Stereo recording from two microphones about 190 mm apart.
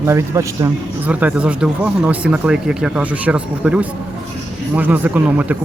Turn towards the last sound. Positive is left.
turn(degrees=-5)  # may be behind; listen again after turning